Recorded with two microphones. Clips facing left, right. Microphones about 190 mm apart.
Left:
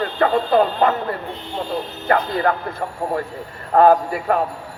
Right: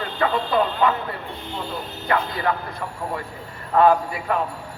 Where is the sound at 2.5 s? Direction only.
50° left (ahead or behind).